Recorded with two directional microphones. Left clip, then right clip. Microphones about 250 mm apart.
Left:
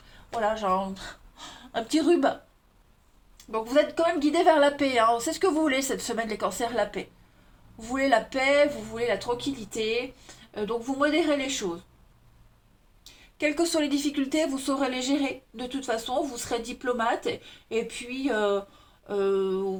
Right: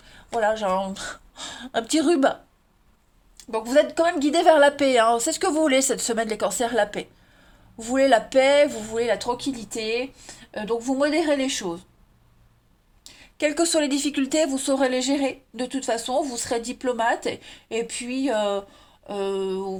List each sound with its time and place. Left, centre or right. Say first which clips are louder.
0.3 s speech: right 4 dB; right
3.5 s speech: right 4 dB; right
10.5 s speech: right 4 dB; right
13.4 s speech: right 4 dB; right